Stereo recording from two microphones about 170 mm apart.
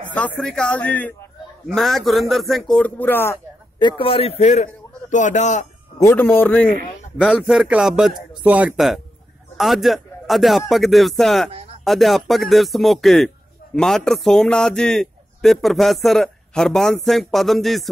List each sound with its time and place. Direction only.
0.4 s a man's voice: 5° left (ahead or behind)
3.8 s a man's voice: 35° left (ahead or behind)
5.9 s a man's voice: 15° left (ahead or behind)
7.2 s a man's voice: 5° right (ahead or behind)